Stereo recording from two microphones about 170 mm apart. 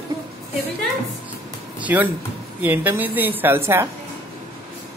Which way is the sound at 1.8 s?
10° right (ahead or behind).